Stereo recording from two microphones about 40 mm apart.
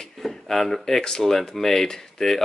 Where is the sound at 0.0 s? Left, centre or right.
Centre.